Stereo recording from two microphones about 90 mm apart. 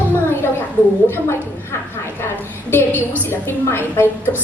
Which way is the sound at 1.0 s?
25° left (ahead or behind).